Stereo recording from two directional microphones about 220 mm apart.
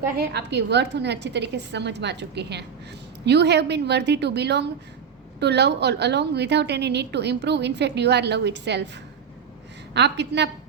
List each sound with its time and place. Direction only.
0.2 s a woman's voice: 50° right (ahead or behind)
9.9 s a woman's voice: 50° right (ahead or behind)